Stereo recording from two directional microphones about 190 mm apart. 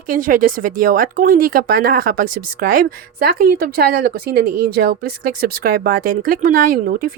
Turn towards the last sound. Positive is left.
turn(degrees=-45)  # may be behind; listen again after turning